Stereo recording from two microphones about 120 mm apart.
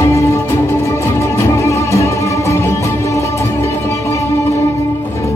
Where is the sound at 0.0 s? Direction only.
25° left (ahead or behind).